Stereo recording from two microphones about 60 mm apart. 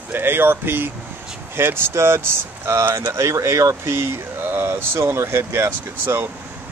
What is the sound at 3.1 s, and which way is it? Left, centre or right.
Speech, right.